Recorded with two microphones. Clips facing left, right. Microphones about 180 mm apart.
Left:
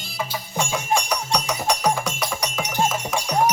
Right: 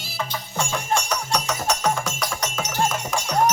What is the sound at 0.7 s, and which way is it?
Music, 10° left (ahead or behind).